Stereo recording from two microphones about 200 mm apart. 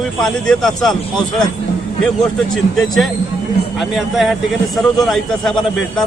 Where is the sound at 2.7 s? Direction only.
Centre (ahead or behind).